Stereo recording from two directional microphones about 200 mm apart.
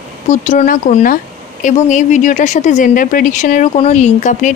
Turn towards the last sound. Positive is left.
turn(degrees=40)  # may be behind; listen again after turning